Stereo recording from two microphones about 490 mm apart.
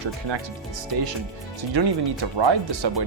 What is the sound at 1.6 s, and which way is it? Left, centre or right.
Speech, right.